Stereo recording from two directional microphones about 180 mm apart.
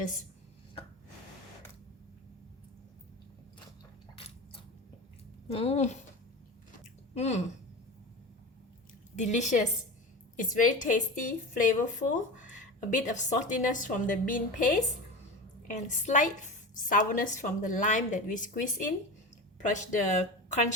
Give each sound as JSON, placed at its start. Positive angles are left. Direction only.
{"t": 4.1, "sound": "a sound", "side_deg": 30}
{"t": 5.5, "sound": "a woman's voice", "side_deg": 35}
{"t": 7.1, "sound": "speech", "side_deg": 40}
{"t": 9.1, "sound": "a woman's voice", "side_deg": 40}
{"t": 19.6, "sound": "a woman's voice", "side_deg": 40}